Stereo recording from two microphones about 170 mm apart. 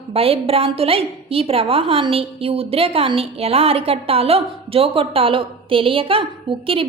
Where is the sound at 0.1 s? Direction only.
35° right (ahead or behind).